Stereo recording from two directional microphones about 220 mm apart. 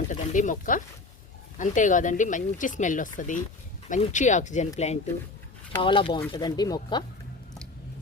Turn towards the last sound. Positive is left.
turn(degrees=20)  # may be behind; listen again after turning